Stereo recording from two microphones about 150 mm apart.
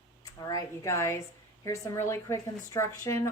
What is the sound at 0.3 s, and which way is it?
Speech, 25° left (ahead or behind).